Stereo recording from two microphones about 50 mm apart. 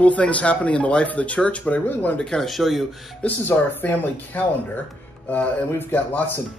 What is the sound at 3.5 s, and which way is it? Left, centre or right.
Speech, left.